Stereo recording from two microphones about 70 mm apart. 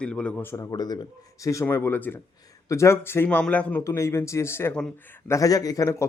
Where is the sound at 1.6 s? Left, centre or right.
Left.